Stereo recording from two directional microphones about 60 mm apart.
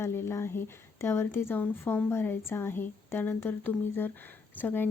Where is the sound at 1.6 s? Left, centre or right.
Left.